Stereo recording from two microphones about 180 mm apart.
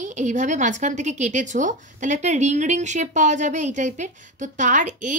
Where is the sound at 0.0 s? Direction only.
45° right (ahead or behind).